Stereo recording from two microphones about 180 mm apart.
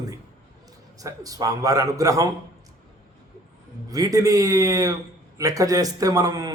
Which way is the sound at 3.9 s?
20° right (ahead or behind).